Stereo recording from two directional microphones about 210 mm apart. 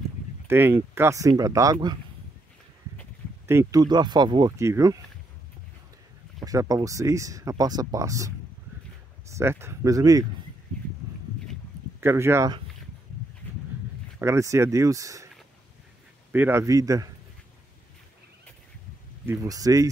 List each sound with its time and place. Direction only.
0.5 s speech: 10° right (ahead or behind)
3.4 s speech: 15° right (ahead or behind)
6.4 s speech: 15° right (ahead or behind)
9.3 s speech: 10° right (ahead or behind)
12.0 s speech: 10° right (ahead or behind)
14.2 s speech: 15° right (ahead or behind)
16.3 s speech: 10° right (ahead or behind)
19.2 s speech: 15° right (ahead or behind)